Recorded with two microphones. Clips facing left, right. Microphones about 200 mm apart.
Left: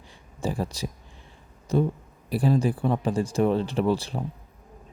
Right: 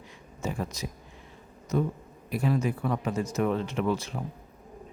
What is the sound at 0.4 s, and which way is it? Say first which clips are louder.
Speech: left 4 dB; 30° left (ahead or behind).